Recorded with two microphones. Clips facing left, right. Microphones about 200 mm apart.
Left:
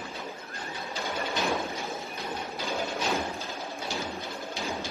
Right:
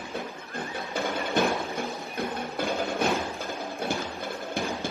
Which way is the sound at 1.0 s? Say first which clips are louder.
Right 6 dB; 55° right (ahead or behind).